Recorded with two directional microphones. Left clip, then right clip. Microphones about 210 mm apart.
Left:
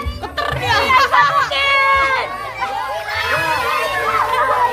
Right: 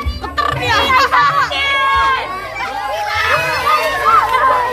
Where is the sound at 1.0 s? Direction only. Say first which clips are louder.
Right 1 dB; 20° left (ahead or behind).